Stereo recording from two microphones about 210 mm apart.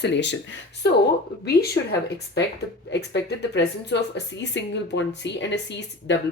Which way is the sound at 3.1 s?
55° left (ahead or behind).